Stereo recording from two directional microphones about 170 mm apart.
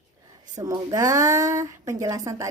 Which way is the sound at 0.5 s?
20° right (ahead or behind).